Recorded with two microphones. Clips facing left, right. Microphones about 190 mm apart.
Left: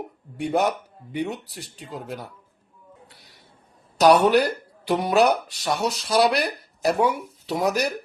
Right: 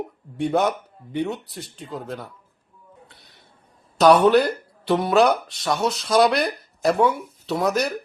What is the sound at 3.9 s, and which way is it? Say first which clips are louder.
Speech: right 2 dB; 10° left (ahead or behind).